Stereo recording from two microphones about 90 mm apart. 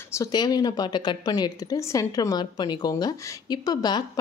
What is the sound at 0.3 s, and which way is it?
Speech, 50° left (ahead or behind).